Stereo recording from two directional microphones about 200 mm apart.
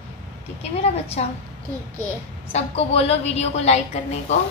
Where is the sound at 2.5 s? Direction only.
30° left (ahead or behind).